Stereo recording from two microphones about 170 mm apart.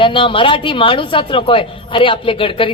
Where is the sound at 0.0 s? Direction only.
30° left (ahead or behind).